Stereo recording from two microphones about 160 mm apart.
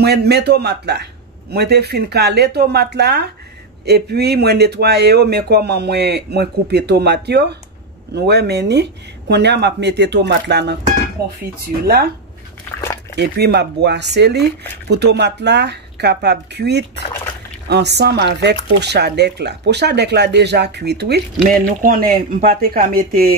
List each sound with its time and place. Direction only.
0.0 s speech: 90° right
13.1 s speech: 90° right
21.5 s speech: 60° right (ahead or behind)